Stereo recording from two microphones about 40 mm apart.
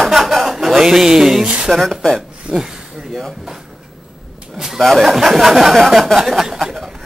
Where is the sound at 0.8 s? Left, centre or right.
Centre.